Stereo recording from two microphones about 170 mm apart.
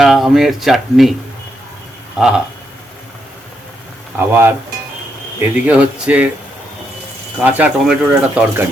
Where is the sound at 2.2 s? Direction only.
5° right (ahead or behind).